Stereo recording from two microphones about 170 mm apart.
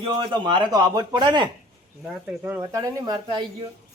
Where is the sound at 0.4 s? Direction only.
25° right (ahead or behind).